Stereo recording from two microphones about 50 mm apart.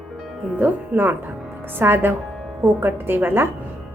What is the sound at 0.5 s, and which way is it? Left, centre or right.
A woman's voice, right.